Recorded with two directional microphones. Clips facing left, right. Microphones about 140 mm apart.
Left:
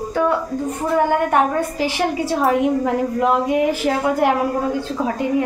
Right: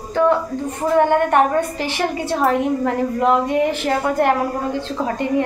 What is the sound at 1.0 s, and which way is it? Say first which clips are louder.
A woman's voice: right 2 dB; 5° left (ahead or behind).